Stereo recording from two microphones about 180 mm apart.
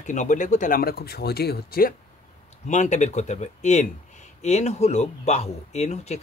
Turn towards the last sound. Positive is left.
turn(degrees=40)  # may be behind; listen again after turning